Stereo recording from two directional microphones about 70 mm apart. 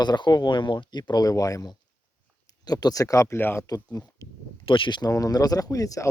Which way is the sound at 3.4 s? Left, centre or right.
Left.